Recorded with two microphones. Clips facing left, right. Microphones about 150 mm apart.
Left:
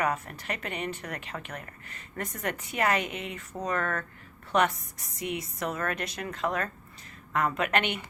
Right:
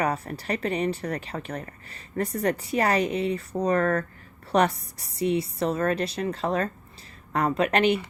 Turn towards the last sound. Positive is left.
turn(degrees=-35)  # may be behind; listen again after turning